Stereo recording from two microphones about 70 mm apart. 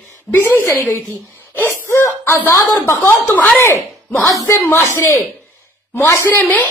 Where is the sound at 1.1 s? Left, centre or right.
Left.